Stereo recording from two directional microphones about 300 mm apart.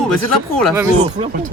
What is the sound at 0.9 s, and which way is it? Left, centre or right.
Speech, right.